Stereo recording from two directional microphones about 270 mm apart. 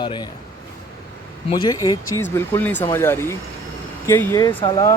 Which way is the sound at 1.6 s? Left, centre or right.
Centre.